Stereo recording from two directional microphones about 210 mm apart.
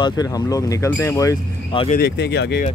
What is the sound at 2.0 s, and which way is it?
Speech, 50° left (ahead or behind).